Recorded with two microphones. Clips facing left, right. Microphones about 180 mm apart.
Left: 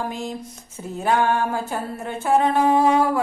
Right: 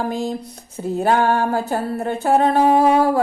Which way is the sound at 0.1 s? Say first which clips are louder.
Right 6 dB; 35° right (ahead or behind).